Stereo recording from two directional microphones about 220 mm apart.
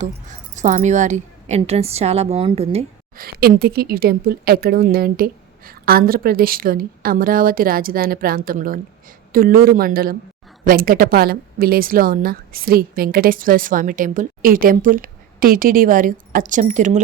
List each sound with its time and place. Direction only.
0.0 s a woman's voice: 35° right (ahead or behind)
3.2 s a woman's voice: 40° right (ahead or behind)